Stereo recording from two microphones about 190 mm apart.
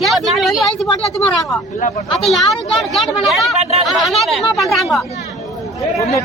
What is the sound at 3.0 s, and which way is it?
Speech, centre (ahead or behind).